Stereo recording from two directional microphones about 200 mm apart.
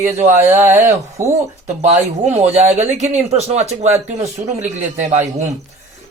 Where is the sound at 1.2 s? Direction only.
40° right (ahead or behind).